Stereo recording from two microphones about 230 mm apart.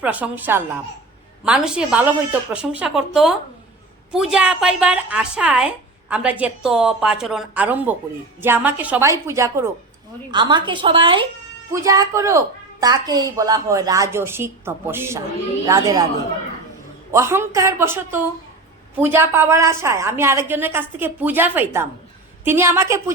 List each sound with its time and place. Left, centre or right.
0.0 s a woman's voice: centre
17.1 s a woman's voice: centre